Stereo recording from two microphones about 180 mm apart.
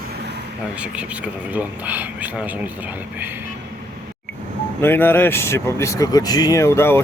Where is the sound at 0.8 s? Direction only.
5° right (ahead or behind).